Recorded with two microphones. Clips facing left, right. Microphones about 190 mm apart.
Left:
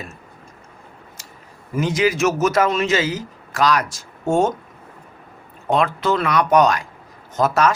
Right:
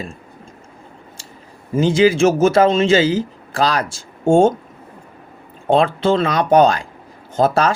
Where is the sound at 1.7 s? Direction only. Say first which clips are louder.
Right 6 dB; 30° right (ahead or behind).